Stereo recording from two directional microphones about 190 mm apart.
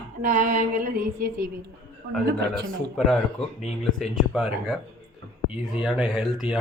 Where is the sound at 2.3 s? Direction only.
60° right (ahead or behind).